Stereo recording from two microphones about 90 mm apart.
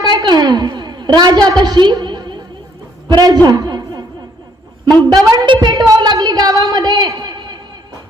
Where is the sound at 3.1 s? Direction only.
45° right (ahead or behind).